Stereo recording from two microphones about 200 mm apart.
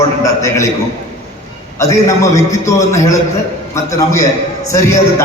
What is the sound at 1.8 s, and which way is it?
A man's voice, 15° left (ahead or behind).